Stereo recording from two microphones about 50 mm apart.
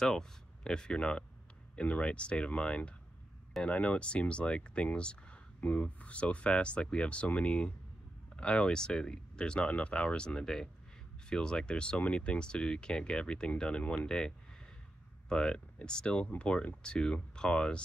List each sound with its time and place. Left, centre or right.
0.0 s speech: centre